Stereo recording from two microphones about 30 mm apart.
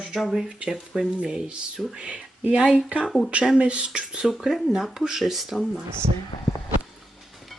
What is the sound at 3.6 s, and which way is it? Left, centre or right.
Speech, right.